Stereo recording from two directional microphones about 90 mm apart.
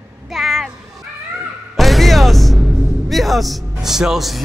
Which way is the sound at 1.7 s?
Centre (ahead or behind).